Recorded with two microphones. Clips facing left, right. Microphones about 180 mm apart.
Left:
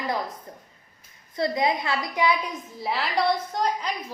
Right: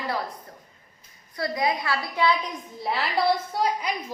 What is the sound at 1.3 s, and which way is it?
A woman's voice, 25° left (ahead or behind).